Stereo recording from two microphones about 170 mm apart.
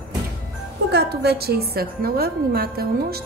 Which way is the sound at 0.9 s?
70° right (ahead or behind).